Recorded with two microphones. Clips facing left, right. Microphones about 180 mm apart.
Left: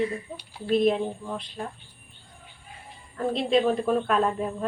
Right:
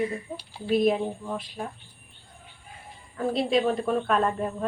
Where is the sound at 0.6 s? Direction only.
5° right (ahead or behind).